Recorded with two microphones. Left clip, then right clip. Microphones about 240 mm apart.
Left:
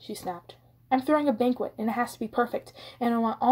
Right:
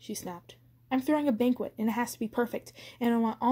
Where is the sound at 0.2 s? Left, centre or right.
Right.